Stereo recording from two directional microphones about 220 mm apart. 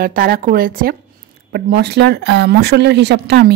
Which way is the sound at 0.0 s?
40° right (ahead or behind).